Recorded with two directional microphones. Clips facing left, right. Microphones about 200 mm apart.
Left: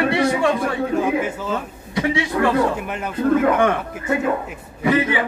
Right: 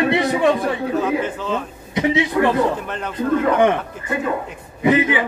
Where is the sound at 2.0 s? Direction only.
20° right (ahead or behind).